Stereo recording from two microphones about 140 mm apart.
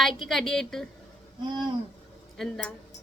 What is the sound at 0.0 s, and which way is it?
Speech, centre (ahead or behind).